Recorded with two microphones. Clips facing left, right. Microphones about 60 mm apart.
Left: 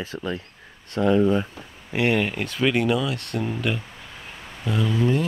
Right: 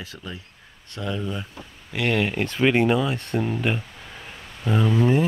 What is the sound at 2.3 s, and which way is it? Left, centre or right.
Speech, centre.